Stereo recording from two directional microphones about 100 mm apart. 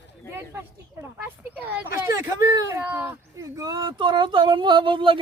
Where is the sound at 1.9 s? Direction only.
30° right (ahead or behind).